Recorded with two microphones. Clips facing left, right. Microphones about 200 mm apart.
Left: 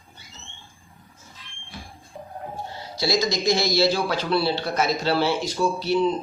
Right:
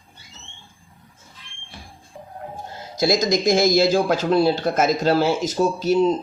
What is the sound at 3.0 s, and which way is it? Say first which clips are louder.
A man's voice: right 5 dB; 45° right (ahead or behind).